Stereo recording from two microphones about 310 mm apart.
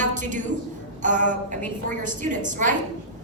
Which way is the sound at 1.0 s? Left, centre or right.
Right.